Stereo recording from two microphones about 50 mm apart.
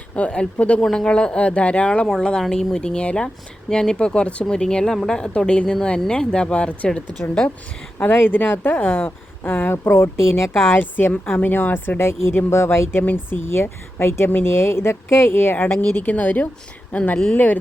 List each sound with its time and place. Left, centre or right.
0.2 s speech: left
7.9 s speech: left
10.8 s speech: left
14.3 s speech: left
14.5 s speech: left